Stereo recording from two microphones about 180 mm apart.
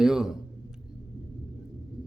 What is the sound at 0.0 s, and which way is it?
Speech, 5° right (ahead or behind).